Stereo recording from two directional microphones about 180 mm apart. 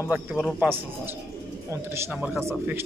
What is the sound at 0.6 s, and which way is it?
A man's voice, 10° right (ahead or behind).